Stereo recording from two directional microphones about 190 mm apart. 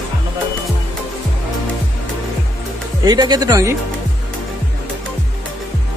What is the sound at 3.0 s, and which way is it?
Speech, 20° right (ahead or behind).